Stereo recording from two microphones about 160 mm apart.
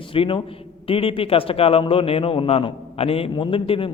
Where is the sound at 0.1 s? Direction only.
35° left (ahead or behind).